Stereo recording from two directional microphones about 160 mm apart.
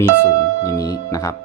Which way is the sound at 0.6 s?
20° left (ahead or behind).